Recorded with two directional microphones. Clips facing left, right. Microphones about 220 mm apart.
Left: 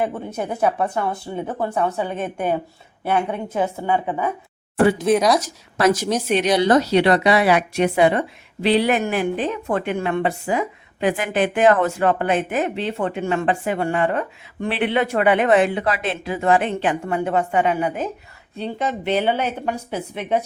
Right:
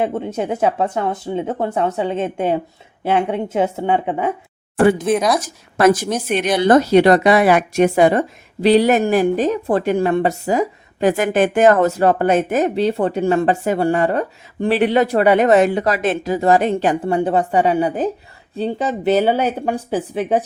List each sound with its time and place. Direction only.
0.0 s speech: 25° right (ahead or behind)
5.0 s speech: centre (ahead or behind)
5.4 s a woman's voice: 50° right (ahead or behind); by 20.4 s 35° right (ahead or behind)